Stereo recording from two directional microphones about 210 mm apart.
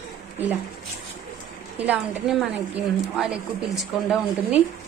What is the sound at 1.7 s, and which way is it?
A woman's voice, 5° right (ahead or behind).